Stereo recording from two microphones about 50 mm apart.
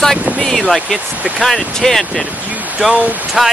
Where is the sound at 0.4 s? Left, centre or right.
Centre.